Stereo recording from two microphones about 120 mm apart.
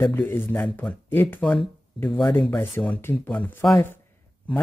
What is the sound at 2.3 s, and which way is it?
Speech, 15° left (ahead or behind).